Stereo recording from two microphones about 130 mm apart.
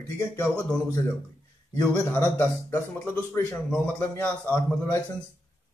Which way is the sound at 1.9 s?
15° left (ahead or behind).